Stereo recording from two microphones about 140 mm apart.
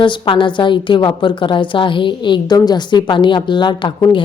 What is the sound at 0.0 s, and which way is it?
A woman's voice, 35° left (ahead or behind).